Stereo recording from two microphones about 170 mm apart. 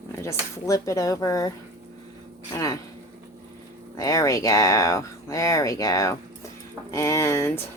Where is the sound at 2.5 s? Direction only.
20° left (ahead or behind).